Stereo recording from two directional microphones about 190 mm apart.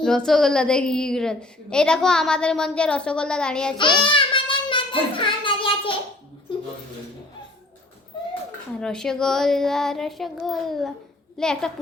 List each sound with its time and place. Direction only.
0.0 s a woman's voice: centre (ahead or behind)
3.8 s child singing: 25° left (ahead or behind)
8.8 s a woman's voice: 5° left (ahead or behind)